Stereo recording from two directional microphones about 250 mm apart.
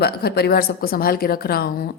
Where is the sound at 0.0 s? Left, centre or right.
Left.